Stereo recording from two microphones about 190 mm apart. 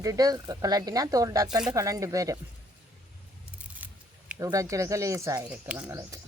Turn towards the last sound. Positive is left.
turn(degrees=-15)  # may be behind; listen again after turning